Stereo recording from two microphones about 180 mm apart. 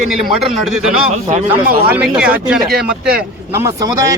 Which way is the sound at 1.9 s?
5° right (ahead or behind).